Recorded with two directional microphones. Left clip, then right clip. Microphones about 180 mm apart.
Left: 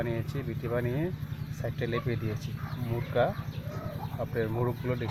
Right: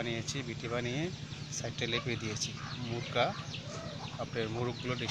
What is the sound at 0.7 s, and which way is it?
Speech, 15° right (ahead or behind).